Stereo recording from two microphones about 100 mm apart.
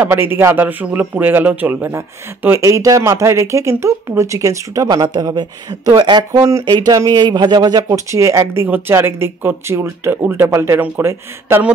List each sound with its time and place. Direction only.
0.0 s a man's voice: 20° right (ahead or behind); by 6.2 s 45° right (ahead or behind)
6.3 s a man's voice: 30° right (ahead or behind)
6.6 s speech: 45° right (ahead or behind)
7.9 s a man's voice: 30° right (ahead or behind)